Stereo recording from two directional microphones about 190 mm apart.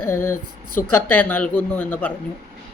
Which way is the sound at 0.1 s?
15° left (ahead or behind).